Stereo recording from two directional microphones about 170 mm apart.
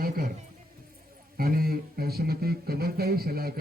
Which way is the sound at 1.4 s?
60° right (ahead or behind).